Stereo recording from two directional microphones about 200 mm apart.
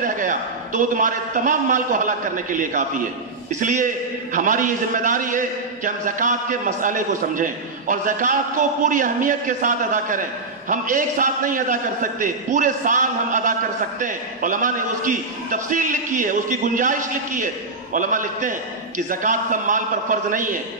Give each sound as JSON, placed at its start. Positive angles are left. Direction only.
{"t": 0.0, "sound": "a man's voice", "side_deg": -40}